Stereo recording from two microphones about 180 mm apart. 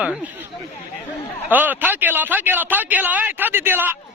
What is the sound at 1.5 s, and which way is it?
A man's voice, 10° right (ahead or behind).